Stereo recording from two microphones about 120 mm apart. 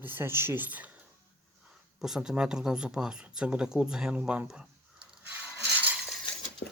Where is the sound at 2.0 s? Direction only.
5° right (ahead or behind).